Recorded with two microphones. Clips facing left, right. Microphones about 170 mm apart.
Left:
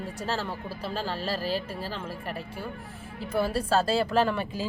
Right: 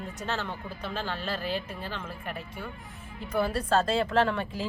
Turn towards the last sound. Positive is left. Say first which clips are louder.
# left 1 dB
turn(degrees=5)  # may be behind; listen again after turning